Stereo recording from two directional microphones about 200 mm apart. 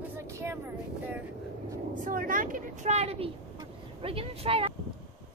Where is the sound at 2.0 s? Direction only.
45° right (ahead or behind); by 4.7 s 30° right (ahead or behind).